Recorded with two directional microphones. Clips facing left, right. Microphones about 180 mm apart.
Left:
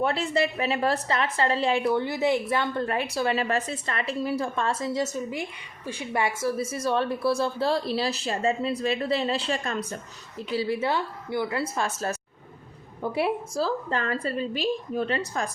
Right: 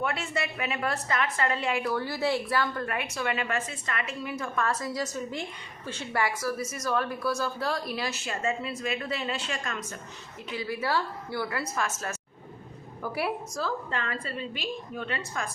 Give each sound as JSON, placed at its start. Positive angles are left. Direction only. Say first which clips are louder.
{"t": 0.0, "sound": "a woman's voice", "louder": "left 6 dB", "side_deg": 30}
{"t": 5.3, "sound": "a woman's voice", "louder": "left 3 dB", "side_deg": 10}
{"t": 6.2, "sound": "a woman's voice", "louder": "left 3 dB", "side_deg": 25}